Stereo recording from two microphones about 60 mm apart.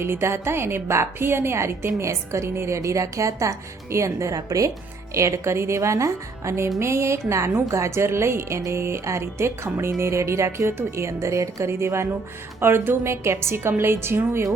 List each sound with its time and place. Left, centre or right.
0.0 s a woman's voice: right
5.1 s a woman's voice: right